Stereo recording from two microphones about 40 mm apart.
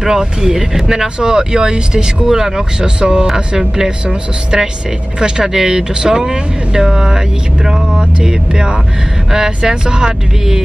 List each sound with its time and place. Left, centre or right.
0.0 s speech: centre